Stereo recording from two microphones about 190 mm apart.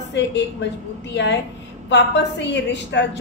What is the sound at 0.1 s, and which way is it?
Speech, 65° left (ahead or behind).